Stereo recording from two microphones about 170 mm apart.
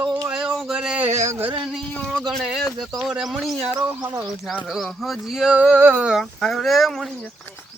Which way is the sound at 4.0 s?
20° right (ahead or behind).